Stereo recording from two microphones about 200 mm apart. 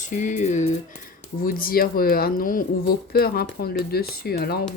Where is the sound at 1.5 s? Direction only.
45° left (ahead or behind).